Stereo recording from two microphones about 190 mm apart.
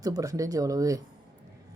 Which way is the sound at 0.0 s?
20° right (ahead or behind).